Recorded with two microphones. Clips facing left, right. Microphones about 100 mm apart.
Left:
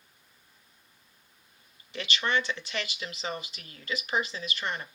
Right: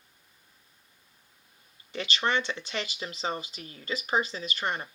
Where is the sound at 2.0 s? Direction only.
35° right (ahead or behind).